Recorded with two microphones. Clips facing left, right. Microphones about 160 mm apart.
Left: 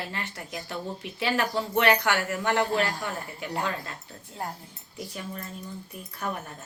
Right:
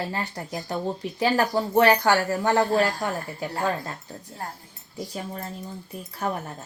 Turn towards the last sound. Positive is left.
turn(degrees=-30)  # may be behind; listen again after turning